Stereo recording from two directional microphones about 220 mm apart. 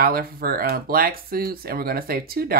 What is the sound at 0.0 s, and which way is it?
Speech, 40° right (ahead or behind).